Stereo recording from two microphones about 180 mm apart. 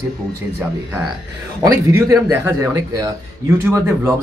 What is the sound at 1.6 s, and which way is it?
Speech, 15° right (ahead or behind).